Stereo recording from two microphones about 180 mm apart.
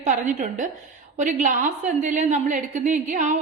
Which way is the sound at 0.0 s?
45° right (ahead or behind).